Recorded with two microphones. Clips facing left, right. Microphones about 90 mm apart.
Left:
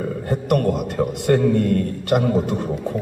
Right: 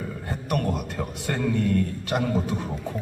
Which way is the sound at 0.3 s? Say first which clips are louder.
Left 8 dB; 50° left (ahead or behind).